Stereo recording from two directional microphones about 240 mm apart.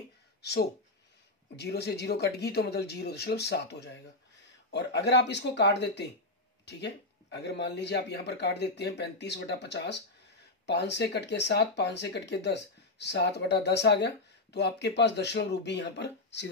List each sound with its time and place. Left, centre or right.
0.4 s speech: left